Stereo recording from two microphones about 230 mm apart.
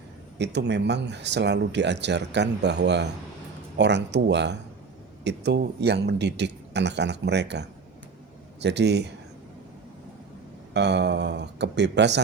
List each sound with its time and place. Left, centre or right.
0.3 s speech: right
10.8 s speech: right